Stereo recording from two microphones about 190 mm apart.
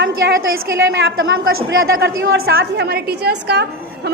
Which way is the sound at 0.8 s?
70° right (ahead or behind).